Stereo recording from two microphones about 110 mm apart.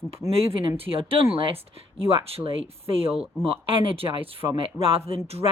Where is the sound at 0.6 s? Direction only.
55° right (ahead or behind).